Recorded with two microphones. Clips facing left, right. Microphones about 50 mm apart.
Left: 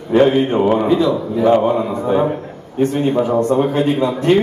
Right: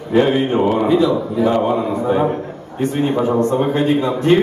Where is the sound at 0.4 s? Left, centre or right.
Centre.